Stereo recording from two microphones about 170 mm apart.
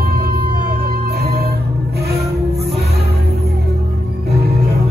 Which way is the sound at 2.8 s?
70° right (ahead or behind).